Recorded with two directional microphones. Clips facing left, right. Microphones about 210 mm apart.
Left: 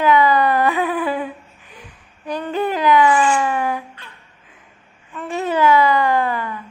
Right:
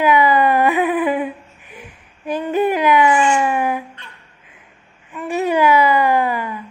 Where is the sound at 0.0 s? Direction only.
15° right (ahead or behind).